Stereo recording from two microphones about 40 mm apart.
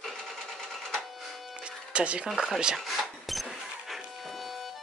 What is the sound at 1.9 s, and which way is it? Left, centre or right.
Speech, right.